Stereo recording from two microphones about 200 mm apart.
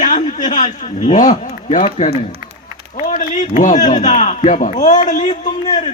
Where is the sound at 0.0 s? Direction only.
40° left (ahead or behind).